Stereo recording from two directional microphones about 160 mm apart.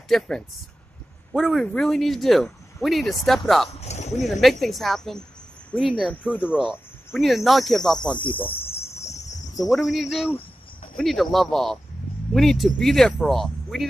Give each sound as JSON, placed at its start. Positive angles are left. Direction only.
{"t": 0.1, "sound": "speech", "side_deg": 0}
{"t": 1.3, "sound": "speech", "side_deg": 0}
{"t": 3.7, "sound": "speech", "side_deg": 45}
{"t": 4.1, "sound": "speech", "side_deg": 0}
{"t": 8.0, "sound": "cricket", "side_deg": 30}
{"t": 8.9, "sound": "cricket", "side_deg": 45}
{"t": 9.6, "sound": "speech", "side_deg": 0}